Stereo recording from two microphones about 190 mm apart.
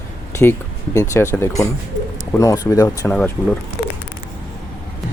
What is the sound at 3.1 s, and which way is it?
Speech, 5° left (ahead or behind).